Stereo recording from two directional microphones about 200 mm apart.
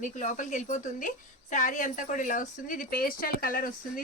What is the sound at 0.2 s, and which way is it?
A woman's voice, 40° left (ahead or behind).